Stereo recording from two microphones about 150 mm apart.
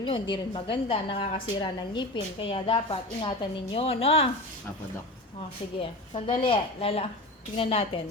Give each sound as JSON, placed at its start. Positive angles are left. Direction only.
{"t": 0.0, "sound": "a woman's voice", "side_deg": 35}
{"t": 5.8, "sound": "a woman's voice", "side_deg": 35}